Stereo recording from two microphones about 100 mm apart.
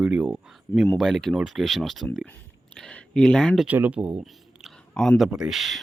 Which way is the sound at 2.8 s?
10° left (ahead or behind).